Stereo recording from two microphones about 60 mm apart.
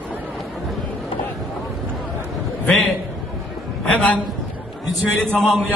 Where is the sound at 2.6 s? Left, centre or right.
Centre.